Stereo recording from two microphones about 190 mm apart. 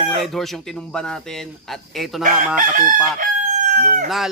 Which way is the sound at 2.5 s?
45° right (ahead or behind).